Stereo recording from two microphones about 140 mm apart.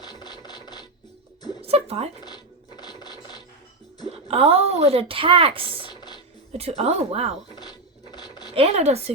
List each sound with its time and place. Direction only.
0.0 s rub: 30° left (ahead or behind)
1.6 s a sound: 45° right (ahead or behind)
2.2 s music: 30° left (ahead or behind)
4.1 s a woman's voice: 45° right (ahead or behind)
7.5 s a sound: 30° left (ahead or behind)
8.5 s speech: 50° right (ahead or behind)